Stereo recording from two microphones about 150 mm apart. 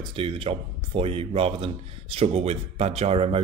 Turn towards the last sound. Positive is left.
turn(degrees=-40)  # may be behind; listen again after turning